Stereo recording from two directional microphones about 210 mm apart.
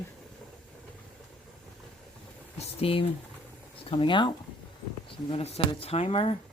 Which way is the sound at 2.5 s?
25° left (ahead or behind).